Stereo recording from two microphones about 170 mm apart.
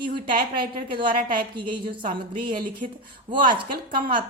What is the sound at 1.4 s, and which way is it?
A woman's voice, 30° right (ahead or behind).